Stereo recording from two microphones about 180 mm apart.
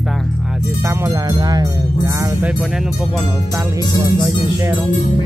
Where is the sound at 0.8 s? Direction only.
15° right (ahead or behind).